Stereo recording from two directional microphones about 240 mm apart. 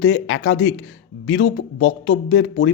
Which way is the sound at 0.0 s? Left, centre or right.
Left.